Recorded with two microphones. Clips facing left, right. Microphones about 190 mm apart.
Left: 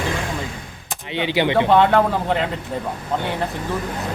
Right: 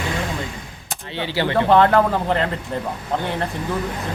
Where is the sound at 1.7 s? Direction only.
Centre (ahead or behind).